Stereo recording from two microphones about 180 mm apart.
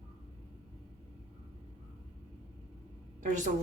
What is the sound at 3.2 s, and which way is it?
Speech, 45° right (ahead or behind).